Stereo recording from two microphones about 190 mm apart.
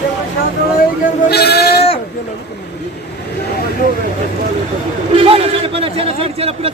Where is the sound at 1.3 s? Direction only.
55° left (ahead or behind).